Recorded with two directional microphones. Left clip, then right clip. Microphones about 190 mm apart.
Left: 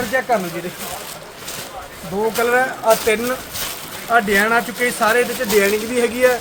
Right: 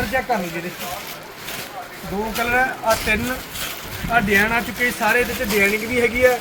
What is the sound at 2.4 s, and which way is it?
Speech, 20° left (ahead or behind).